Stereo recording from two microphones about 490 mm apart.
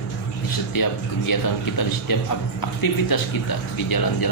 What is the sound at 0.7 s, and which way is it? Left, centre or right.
A man's voice, left.